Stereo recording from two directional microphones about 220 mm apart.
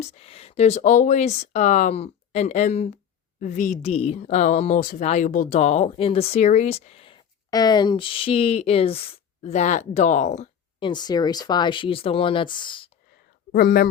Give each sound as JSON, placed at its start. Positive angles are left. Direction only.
{"t": 0.0, "sound": "a woman's voice", "side_deg": 30}
{"t": 13.5, "sound": "speech", "side_deg": 40}